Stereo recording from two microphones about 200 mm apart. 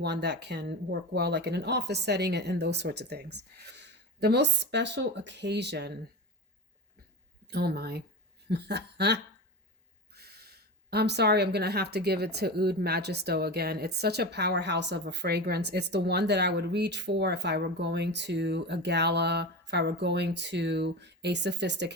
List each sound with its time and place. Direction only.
0.0 s speech: 55° right (ahead or behind)
7.4 s speech: 55° right (ahead or behind)